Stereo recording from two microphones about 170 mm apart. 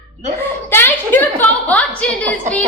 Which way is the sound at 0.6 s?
15° left (ahead or behind).